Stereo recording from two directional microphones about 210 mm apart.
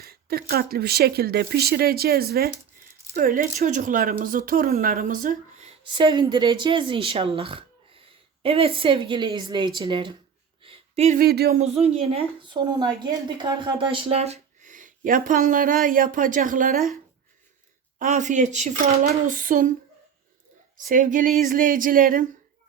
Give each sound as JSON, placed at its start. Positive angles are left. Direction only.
{"t": 0.0, "sound": "speech", "side_deg": -45}
{"t": 5.8, "sound": "speech", "side_deg": -25}
{"t": 10.6, "sound": "a sound", "side_deg": -30}
{"t": 11.2, "sound": "speech", "side_deg": -45}
{"t": 11.5, "sound": "speech", "side_deg": -30}
{"t": 18.0, "sound": "speech", "side_deg": -35}
{"t": 20.9, "sound": "speech", "side_deg": -40}